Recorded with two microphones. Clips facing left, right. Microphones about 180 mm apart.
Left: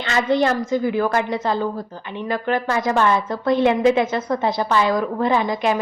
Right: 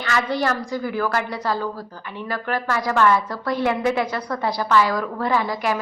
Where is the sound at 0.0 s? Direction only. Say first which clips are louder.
Left 4 dB; 20° left (ahead or behind).